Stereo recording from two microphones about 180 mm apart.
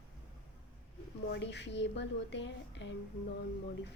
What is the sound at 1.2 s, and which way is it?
A woman's voice, 75° left (ahead or behind).